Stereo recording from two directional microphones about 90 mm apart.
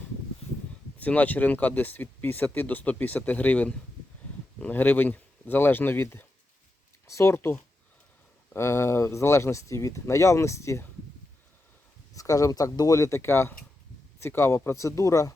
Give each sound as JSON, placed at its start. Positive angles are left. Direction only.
{"t": 0.9, "sound": "speech", "side_deg": 15}
{"t": 12.1, "sound": "speech", "side_deg": 40}